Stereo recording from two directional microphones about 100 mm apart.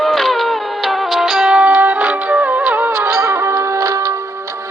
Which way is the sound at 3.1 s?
30° right (ahead or behind).